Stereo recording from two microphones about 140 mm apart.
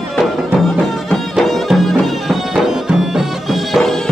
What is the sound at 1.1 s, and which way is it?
Music, centre (ahead or behind).